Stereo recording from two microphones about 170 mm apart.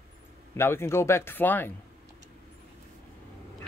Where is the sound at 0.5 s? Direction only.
15° left (ahead or behind).